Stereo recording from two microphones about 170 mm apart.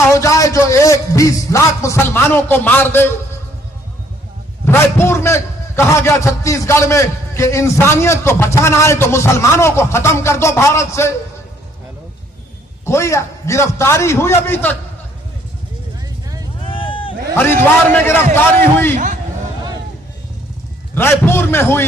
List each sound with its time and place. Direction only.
0.1 s a man's voice: 20° left (ahead or behind)
4.6 s a man's voice: 15° left (ahead or behind)
12.8 s a man's voice: 15° left (ahead or behind)
16.6 s a sound: 30° left (ahead or behind)
17.3 s a man's voice: 15° left (ahead or behind)
18.9 s a sound: 50° right (ahead or behind)
20.9 s a man's voice: 15° left (ahead or behind)